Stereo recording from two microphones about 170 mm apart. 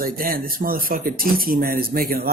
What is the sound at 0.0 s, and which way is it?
Speech, 55° right (ahead or behind).